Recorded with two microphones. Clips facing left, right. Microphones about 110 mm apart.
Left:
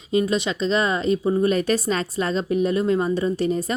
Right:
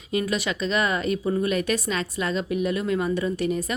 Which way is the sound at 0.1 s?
25° left (ahead or behind).